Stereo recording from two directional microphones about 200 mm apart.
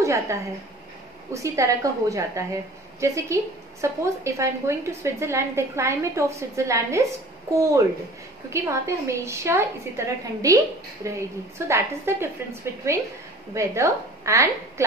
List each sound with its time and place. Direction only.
0.0 s a woman's voice: 15° right (ahead or behind)
8.5 s a woman's voice: 15° right (ahead or behind)